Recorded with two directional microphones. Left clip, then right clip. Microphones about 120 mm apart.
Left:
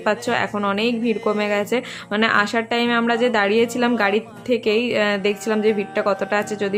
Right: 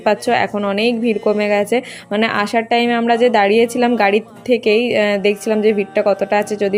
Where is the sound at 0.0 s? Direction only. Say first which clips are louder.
Right 5 dB; 30° right (ahead or behind).